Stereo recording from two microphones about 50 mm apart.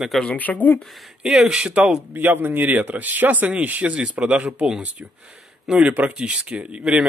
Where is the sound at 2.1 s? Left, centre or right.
Right.